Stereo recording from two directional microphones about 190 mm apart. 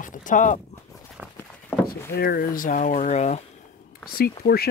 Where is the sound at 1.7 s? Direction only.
10° left (ahead or behind).